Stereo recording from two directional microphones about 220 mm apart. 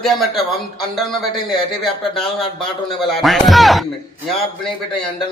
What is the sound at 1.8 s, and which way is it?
Speech, centre (ahead or behind).